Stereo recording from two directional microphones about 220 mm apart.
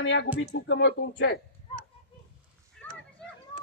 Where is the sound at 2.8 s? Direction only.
5° left (ahead or behind).